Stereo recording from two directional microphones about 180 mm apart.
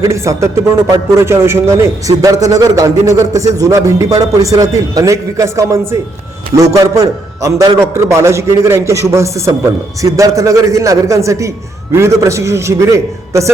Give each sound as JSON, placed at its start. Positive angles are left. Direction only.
{"t": 0.0, "sound": "a man's voice", "side_deg": -15}